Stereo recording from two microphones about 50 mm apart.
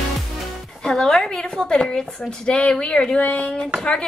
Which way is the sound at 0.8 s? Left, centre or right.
Centre.